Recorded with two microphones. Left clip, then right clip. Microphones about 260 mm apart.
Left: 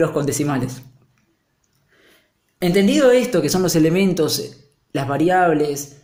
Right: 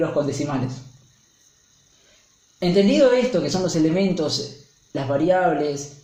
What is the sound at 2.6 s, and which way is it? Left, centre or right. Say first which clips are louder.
Speech: left 1 dB; left.